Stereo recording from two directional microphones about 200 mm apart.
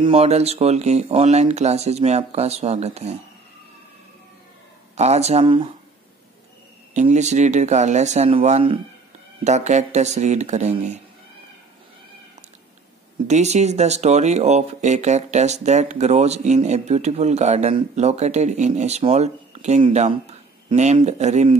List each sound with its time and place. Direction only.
0.0 s speech: 30° right (ahead or behind)
4.9 s speech: 35° right (ahead or behind)
6.9 s speech: 35° right (ahead or behind)
13.3 s speech: 35° right (ahead or behind)